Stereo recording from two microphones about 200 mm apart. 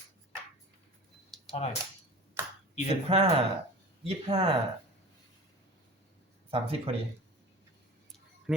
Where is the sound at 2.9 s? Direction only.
30° right (ahead or behind).